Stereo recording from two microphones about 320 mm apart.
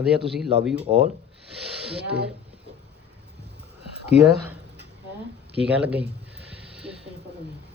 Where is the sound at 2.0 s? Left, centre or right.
Right.